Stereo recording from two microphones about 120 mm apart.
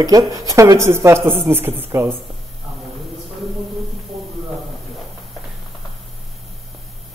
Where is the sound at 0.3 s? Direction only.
25° right (ahead or behind).